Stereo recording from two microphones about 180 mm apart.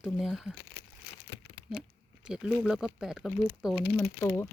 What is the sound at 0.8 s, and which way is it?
Crumpling, 60° left (ahead or behind).